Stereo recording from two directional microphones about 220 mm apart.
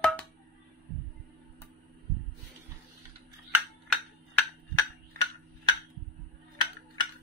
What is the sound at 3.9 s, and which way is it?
Tick-tock, 10° left (ahead or behind).